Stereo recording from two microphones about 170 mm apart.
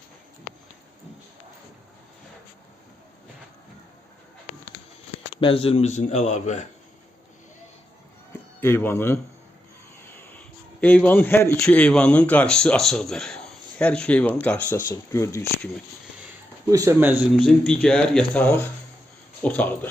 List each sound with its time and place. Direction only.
5.4 s speech: 30° left (ahead or behind)
8.6 s speech: 15° left (ahead or behind)
10.2 s a sound: 10° left (ahead or behind)
11.6 s speech: 5° left (ahead or behind)
16.6 s speech: 20° right (ahead or behind)
17.3 s speech: 5° left (ahead or behind)